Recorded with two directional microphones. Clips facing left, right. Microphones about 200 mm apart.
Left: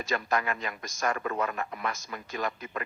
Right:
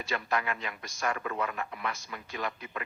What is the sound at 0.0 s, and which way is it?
A man's voice, 45° left (ahead or behind).